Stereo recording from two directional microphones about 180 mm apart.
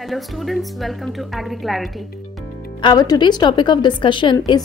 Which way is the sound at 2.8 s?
25° left (ahead or behind).